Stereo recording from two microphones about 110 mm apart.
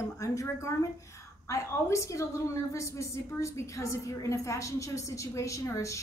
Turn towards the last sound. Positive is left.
turn(degrees=30)  # may be behind; listen again after turning